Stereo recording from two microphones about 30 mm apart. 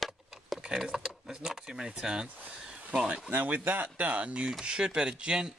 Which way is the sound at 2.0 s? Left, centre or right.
Right.